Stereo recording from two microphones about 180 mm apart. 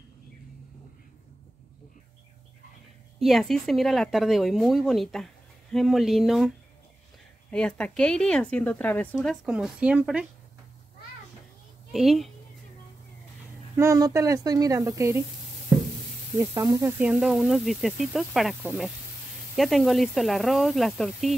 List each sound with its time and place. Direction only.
3.2 s speech: centre (ahead or behind)
7.5 s speech: 5° left (ahead or behind)
11.9 s speech: centre (ahead or behind)
13.7 s speech: 20° right (ahead or behind)
16.3 s speech: 20° right (ahead or behind)
17.0 s speech: 5° right (ahead or behind)